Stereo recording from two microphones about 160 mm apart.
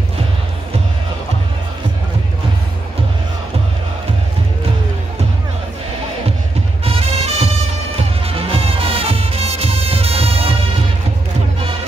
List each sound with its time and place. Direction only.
6.8 s music: 40° right (ahead or behind)